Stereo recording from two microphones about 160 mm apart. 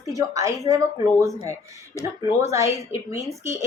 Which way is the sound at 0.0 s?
20° right (ahead or behind).